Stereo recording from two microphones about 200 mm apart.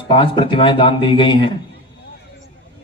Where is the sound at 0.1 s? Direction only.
25° left (ahead or behind).